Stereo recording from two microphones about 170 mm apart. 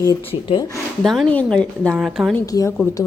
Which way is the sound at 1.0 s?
Centre (ahead or behind).